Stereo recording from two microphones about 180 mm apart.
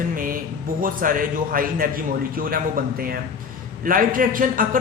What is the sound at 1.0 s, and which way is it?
Speech, 50° right (ahead or behind).